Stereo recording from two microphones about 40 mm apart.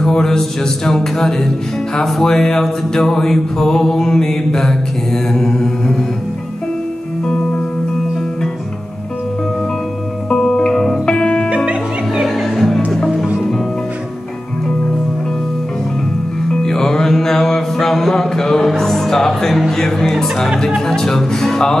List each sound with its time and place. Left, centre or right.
0.0 s mantra: centre
10.3 s music: centre
11.4 s music: right
12.2 s music: centre
16.4 s music: centre
19.8 s mantra: centre